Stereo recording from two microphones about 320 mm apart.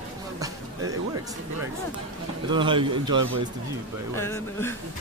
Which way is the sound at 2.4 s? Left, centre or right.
Centre.